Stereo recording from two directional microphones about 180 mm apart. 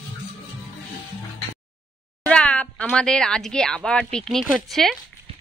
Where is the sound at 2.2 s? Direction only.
5° left (ahead or behind).